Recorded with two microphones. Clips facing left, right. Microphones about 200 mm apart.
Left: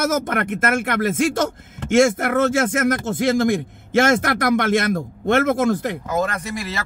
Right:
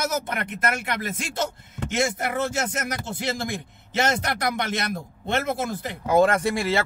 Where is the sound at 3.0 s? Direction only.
80° left.